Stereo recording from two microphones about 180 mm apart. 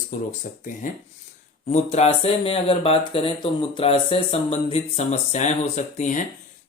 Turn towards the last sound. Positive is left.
turn(degrees=40)  # may be behind; listen again after turning